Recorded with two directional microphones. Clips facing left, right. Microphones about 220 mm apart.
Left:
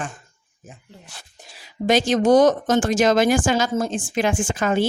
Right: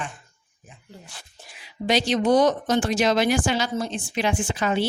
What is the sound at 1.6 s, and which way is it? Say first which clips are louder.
Speech: left 4 dB; 50° left (ahead or behind).